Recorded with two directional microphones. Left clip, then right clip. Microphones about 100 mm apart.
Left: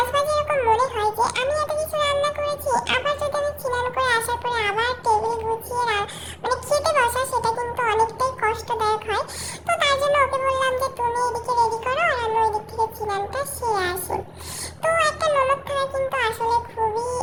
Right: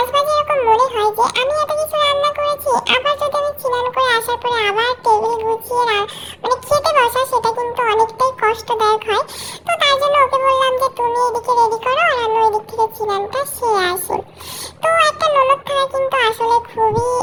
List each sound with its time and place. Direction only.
0.1 s a sound: 35° right (ahead or behind)
2.3 s music: 40° right (ahead or behind)
9.6 s music: 35° right (ahead or behind); by 14.2 s 50° right (ahead or behind)
14.8 s child singing: 40° right (ahead or behind)